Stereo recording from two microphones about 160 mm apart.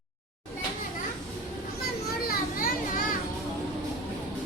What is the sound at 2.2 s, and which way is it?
Children playing, 65° left (ahead or behind).